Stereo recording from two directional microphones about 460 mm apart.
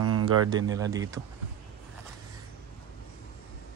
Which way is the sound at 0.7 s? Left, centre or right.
Centre.